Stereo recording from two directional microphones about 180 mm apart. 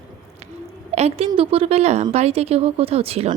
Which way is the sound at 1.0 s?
35° right (ahead or behind).